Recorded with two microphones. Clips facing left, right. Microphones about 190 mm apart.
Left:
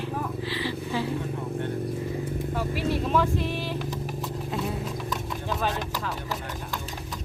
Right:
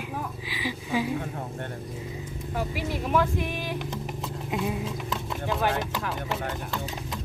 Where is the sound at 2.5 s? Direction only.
15° right (ahead or behind).